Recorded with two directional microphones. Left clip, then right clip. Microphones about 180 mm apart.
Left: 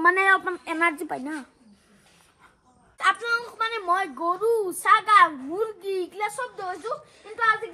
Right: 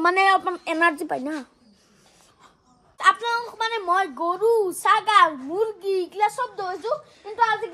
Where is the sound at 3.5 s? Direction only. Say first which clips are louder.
Right 4 dB; 30° right (ahead or behind).